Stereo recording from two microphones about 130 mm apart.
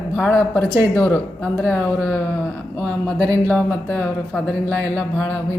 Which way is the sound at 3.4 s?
10° left (ahead or behind).